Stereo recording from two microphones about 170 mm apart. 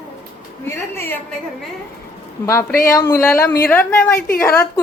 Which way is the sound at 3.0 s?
15° left (ahead or behind).